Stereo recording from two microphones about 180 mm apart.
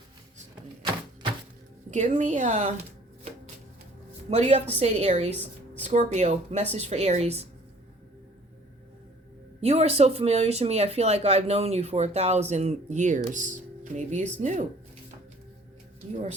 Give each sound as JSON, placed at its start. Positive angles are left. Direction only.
{"t": 1.9, "sound": "speech", "side_deg": -40}
{"t": 4.3, "sound": "speech", "side_deg": -35}
{"t": 9.6, "sound": "speech", "side_deg": -35}